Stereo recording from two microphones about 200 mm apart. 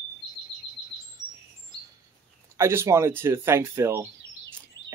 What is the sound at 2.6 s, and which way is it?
Speech, 15° right (ahead or behind).